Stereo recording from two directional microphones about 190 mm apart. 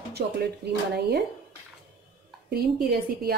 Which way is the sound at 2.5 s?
55° right (ahead or behind).